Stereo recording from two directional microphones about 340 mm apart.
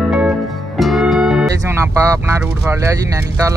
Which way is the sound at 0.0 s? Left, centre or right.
Centre.